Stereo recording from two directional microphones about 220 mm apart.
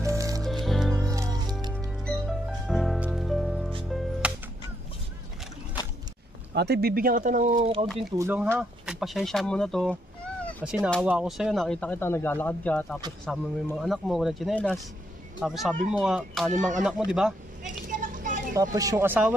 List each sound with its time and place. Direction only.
0.0 s music: 15° right (ahead or behind)
0.4 s music: centre (ahead or behind)
1.1 s music: 15° right (ahead or behind)
1.8 s music: centre (ahead or behind)
6.5 s speech: 50° right (ahead or behind)
7.5 s speech: 25° right (ahead or behind)
8.2 s speech: 10° right (ahead or behind)
16.5 s speech: 35° right (ahead or behind)
16.8 s speech: 5° right (ahead or behind)
17.8 s a sound: 35° right (ahead or behind)
18.6 s speech: 15° right (ahead or behind)